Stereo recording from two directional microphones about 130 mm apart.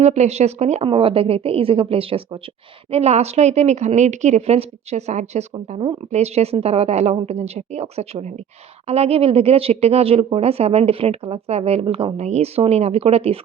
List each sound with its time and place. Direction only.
0.0 s a woman's voice: 60° right (ahead or behind)
0.9 s a woman's voice: 45° right (ahead or behind)